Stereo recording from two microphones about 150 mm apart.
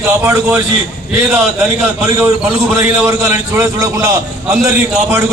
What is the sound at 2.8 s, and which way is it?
A man's voice, 20° right (ahead or behind).